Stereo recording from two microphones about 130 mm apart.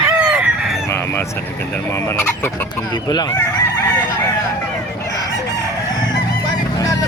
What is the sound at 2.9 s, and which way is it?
Speech, 35° left (ahead or behind).